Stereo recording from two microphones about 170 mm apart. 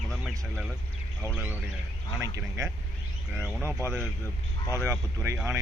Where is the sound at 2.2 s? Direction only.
20° right (ahead or behind).